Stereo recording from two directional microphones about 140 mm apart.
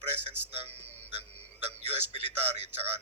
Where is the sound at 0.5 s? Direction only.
45° right (ahead or behind).